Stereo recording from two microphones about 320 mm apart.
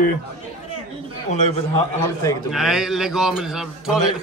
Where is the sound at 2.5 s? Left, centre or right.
Centre.